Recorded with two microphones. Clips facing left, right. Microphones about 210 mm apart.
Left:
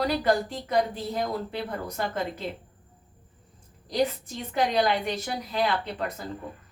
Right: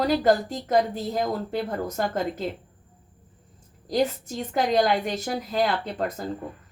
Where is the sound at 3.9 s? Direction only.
45° right (ahead or behind).